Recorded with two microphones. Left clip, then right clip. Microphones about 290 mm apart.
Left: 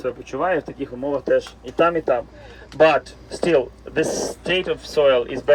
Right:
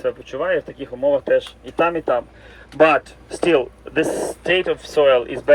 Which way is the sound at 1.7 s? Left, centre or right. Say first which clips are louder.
Even; right.